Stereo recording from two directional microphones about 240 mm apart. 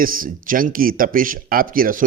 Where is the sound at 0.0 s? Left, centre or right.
Right.